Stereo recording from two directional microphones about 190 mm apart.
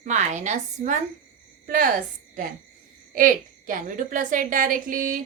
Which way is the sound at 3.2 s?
45° right (ahead or behind).